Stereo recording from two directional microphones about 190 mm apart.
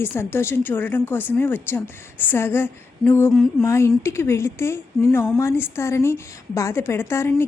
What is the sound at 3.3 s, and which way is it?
Mantra, centre (ahead or behind).